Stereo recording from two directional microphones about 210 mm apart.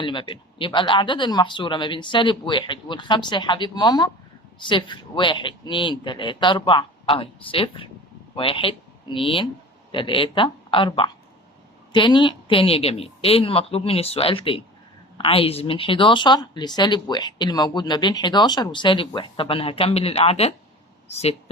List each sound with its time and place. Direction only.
0.0 s a woman's voice: 25° left (ahead or behind)